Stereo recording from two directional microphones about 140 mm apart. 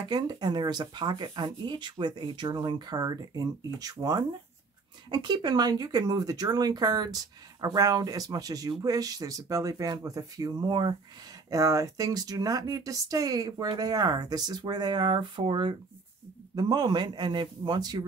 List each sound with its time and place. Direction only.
0.1 s speech: 30° right (ahead or behind)